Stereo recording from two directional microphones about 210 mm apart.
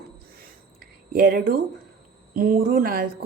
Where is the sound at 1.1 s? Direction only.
45° right (ahead or behind).